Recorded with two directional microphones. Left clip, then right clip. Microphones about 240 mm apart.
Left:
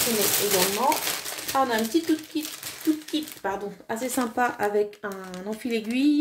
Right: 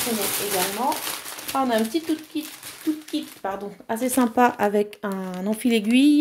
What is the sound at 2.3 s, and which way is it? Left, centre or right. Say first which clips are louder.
Speech: even; centre.